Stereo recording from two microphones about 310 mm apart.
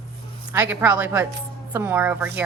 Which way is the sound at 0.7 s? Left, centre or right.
Centre.